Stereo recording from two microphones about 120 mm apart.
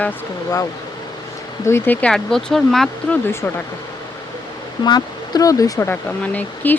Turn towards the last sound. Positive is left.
turn(degrees=10)  # may be behind; listen again after turning